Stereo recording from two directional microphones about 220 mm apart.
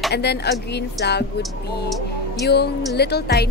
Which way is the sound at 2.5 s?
50° left (ahead or behind).